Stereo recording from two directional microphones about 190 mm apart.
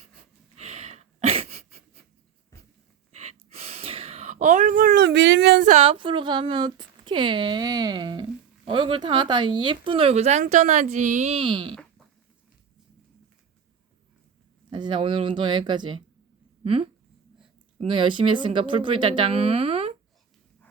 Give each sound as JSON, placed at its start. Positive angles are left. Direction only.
{"t": 0.5, "sound": "sneeze", "side_deg": -35}
{"t": 3.2, "sound": "a sound", "side_deg": -35}
{"t": 5.6, "sound": "speech", "side_deg": -35}
{"t": 14.7, "sound": "speech", "side_deg": -25}